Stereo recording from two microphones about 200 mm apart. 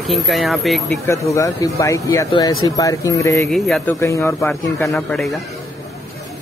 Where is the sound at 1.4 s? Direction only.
15° left (ahead or behind).